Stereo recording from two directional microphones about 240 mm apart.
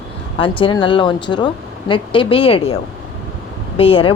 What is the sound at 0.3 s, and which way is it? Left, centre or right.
Speech, left.